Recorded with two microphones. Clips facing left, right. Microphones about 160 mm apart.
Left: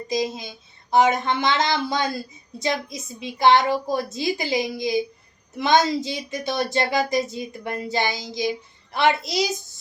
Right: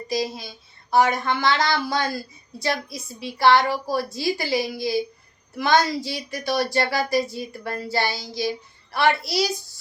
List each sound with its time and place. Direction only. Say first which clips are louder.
0.1 s speech: left 1 dB; 20° left (ahead or behind)